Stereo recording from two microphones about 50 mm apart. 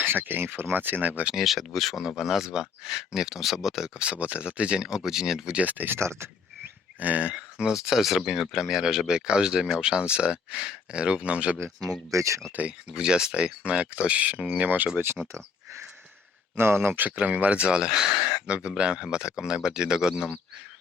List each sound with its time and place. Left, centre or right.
0.0 s speech: right
1.4 s speech: centre
5.5 s speech: right
6.0 s speech: right
7.0 s speech: right
7.3 s speech: centre
12.1 s speech: right
12.5 s speech: right
13.0 s speech: centre; by 14.8 s right
15.2 s speech: centre
16.6 s speech: right; by 18.4 s centre
18.4 s speech: right